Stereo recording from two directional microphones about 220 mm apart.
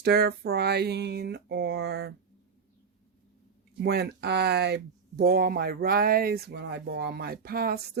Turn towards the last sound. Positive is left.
turn(degrees=-45)  # may be behind; listen again after turning